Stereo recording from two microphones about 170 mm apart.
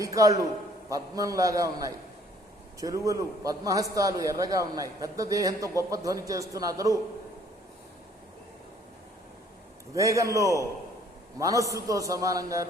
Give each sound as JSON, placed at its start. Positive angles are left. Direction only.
{"t": 0.0, "sound": "a man's voice", "side_deg": -20}
{"t": 9.9, "sound": "a man's voice", "side_deg": -20}